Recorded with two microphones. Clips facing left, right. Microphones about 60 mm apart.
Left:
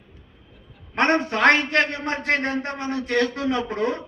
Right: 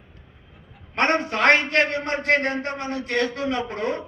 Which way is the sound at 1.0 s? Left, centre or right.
Right.